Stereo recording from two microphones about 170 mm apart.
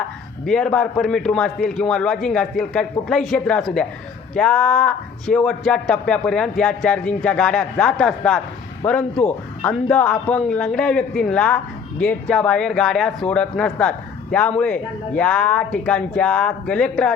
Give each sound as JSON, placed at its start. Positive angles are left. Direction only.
{"t": 0.4, "sound": "a man's voice", "side_deg": 5}